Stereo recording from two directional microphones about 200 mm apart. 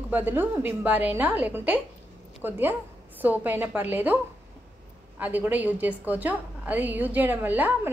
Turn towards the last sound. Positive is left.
turn(degrees=-10)  # may be behind; listen again after turning